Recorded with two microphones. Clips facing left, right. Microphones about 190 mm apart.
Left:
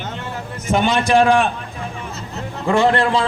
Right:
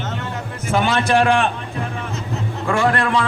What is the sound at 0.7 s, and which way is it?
Speech, 15° left (ahead or behind).